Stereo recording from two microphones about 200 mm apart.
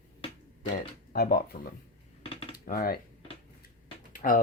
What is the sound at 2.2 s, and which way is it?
Typing, 25° left (ahead or behind).